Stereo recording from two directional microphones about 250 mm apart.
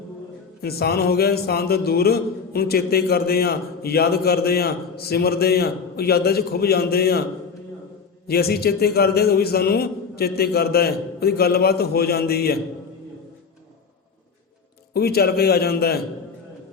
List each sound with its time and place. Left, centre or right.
0.6 s speech: left
8.3 s speech: left
14.9 s speech: left